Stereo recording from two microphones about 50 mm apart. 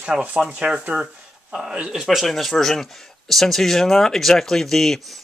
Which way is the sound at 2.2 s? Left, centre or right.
Centre.